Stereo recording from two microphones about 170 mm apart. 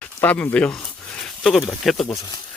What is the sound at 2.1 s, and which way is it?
Speech, 20° left (ahead or behind).